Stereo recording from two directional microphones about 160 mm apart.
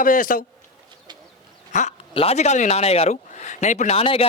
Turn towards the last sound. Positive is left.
turn(degrees=35)  # may be behind; listen again after turning